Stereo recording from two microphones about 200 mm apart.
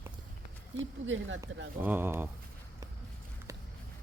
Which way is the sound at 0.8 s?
70° right (ahead or behind).